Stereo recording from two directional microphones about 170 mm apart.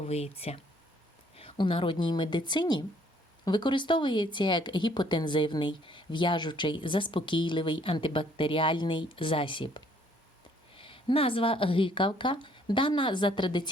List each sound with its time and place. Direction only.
0.0 s speech: 35° left (ahead or behind)